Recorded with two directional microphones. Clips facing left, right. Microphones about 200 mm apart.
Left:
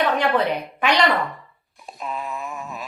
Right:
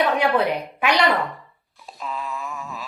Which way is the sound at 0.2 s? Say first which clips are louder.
Even; 10° right (ahead or behind).